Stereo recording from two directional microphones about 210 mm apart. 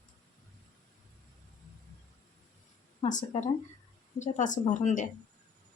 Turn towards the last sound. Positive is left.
turn(degrees=35)  # may be behind; listen again after turning